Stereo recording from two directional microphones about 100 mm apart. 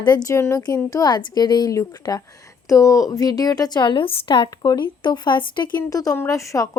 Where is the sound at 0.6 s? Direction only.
40° left (ahead or behind).